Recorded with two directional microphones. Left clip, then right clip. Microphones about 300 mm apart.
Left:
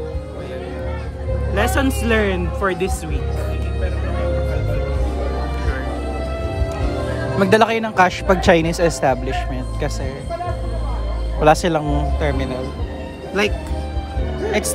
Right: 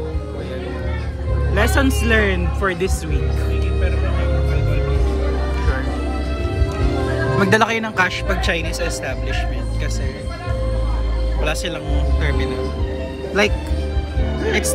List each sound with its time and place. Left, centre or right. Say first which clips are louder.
1.5 s speech: right 1 dB; centre
7.3 s speech: left 2 dB; centre
11.4 s speech: left 10 dB; left
13.4 s speech: right 2 dB; centre